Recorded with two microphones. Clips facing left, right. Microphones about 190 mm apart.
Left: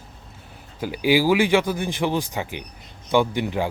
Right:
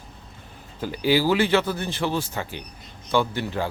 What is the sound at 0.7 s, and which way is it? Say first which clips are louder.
Speech: left 2 dB; 10° left (ahead or behind).